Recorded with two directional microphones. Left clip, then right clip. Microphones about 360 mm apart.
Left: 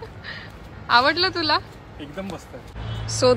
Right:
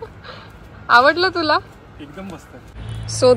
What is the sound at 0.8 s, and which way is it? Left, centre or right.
Speech, centre.